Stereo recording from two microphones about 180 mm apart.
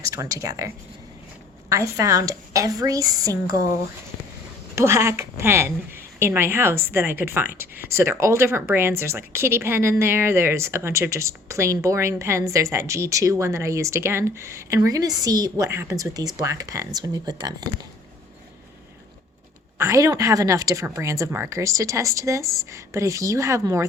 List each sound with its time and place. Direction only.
0.1 s a woman's voice: 20° right (ahead or behind)
1.7 s a woman's voice: 15° right (ahead or behind)
4.7 s a woman's voice: 15° right (ahead or behind)
19.8 s a woman's voice: 15° right (ahead or behind)